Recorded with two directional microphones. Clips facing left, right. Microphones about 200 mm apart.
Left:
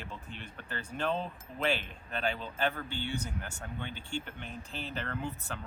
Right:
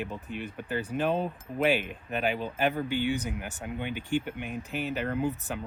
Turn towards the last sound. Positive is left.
turn(degrees=-15)  # may be behind; listen again after turning